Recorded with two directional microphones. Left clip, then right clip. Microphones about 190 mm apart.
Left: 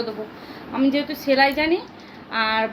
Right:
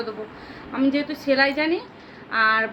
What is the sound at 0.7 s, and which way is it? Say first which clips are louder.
A woman's voice: left 1 dB; 15° right (ahead or behind).